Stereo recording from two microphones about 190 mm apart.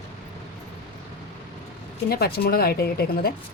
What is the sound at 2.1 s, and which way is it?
Speech, 55° left (ahead or behind).